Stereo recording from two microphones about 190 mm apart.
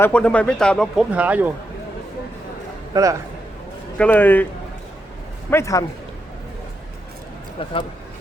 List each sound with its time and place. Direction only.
0.0 s speech: 5° left (ahead or behind)
2.9 s a man's voice: 15° right (ahead or behind)
3.9 s speech: 10° left (ahead or behind)
5.5 s speech: 15° left (ahead or behind)
7.6 s speech: 25° left (ahead or behind)